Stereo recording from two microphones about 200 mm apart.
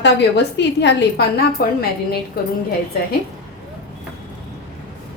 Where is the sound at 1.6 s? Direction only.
50° left (ahead or behind).